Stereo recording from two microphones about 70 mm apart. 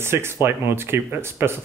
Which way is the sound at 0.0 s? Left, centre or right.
Right.